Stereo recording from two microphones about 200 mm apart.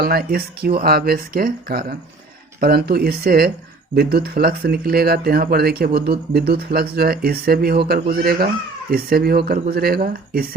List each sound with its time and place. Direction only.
0.0 s speech: 50° right (ahead or behind)